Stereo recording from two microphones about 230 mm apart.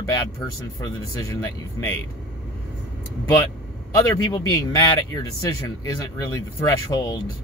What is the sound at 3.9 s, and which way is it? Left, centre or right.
Speech, centre.